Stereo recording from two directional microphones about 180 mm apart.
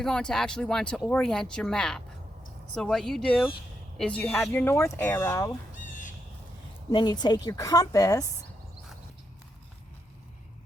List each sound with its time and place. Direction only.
0.0 s speech: 5° left (ahead or behind)
6.9 s a woman's voice: 25° left (ahead or behind)